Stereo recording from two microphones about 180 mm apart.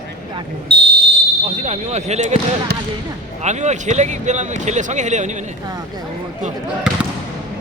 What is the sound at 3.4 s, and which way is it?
Speech, 40° right (ahead or behind).